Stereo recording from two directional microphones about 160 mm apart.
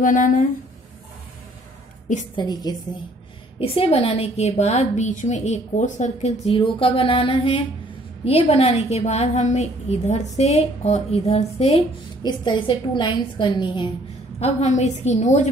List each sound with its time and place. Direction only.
0.0 s speech: 55° left (ahead or behind)
2.3 s a woman's voice: 25° left (ahead or behind)
3.5 s a woman's voice: 35° left (ahead or behind)
12.2 s a woman's voice: 30° left (ahead or behind)
14.4 s a woman's voice: 45° left (ahead or behind)